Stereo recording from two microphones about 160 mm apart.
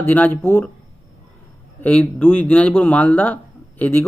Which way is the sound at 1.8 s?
10° left (ahead or behind).